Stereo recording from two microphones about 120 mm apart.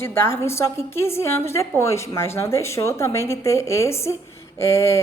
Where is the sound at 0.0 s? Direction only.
20° left (ahead or behind).